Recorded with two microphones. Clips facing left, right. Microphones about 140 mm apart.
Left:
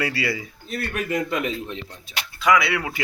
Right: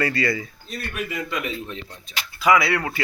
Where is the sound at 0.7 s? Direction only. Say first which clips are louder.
Left 4 dB; 50° left (ahead or behind).